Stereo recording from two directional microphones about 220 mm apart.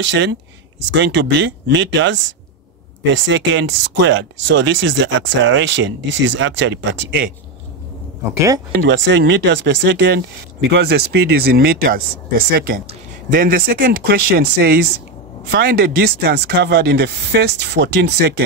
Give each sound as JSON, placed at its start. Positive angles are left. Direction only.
{"t": 0.0, "sound": "speech", "side_deg": -55}
{"t": 8.8, "sound": "speech", "side_deg": -55}